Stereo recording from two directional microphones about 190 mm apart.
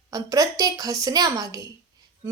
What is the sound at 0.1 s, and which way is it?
A woman's voice, 20° right (ahead or behind).